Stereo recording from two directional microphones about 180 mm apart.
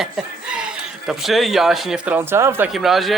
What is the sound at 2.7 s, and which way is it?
Speech, centre (ahead or behind).